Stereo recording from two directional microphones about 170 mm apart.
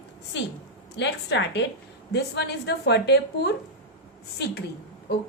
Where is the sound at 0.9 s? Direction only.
90° left.